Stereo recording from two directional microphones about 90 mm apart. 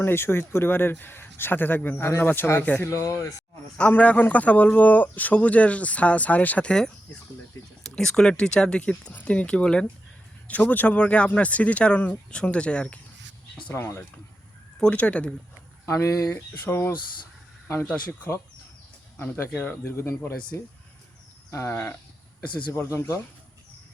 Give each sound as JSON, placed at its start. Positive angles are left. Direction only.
{"t": 0.0, "sound": "speech", "side_deg": 25}
{"t": 2.9, "sound": "speech", "side_deg": 35}
{"t": 3.8, "sound": "speech", "side_deg": 15}
{"t": 13.7, "sound": "speech", "side_deg": 30}
{"t": 14.8, "sound": "speech", "side_deg": 15}
{"t": 15.9, "sound": "speech", "side_deg": 35}
{"t": 19.5, "sound": "speech", "side_deg": 15}
{"t": 19.8, "sound": "speech", "side_deg": 30}
{"t": 21.5, "sound": "a sound", "side_deg": 30}
{"t": 22.4, "sound": "speech", "side_deg": 30}